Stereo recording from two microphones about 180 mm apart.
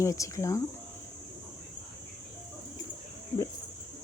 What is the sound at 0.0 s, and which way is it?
Speech, 15° left (ahead or behind).